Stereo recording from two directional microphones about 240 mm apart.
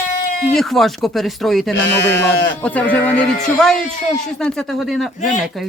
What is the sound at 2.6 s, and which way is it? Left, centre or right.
A man's voice, centre.